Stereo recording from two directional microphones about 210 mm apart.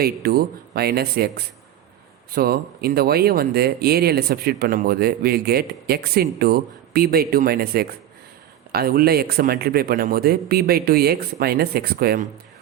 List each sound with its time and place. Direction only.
0.0 s speech: 45° right (ahead or behind)